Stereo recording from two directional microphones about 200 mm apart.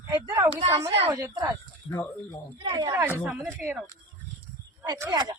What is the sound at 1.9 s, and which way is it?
Speech, 15° left (ahead or behind).